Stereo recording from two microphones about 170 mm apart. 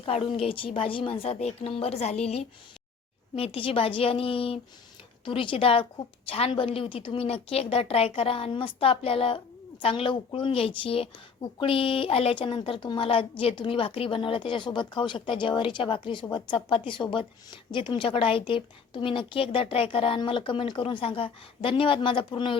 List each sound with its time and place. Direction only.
0.1 s a woman's voice: 35° left (ahead or behind)